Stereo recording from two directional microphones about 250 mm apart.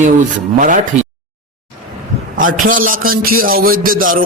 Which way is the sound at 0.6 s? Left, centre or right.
Right.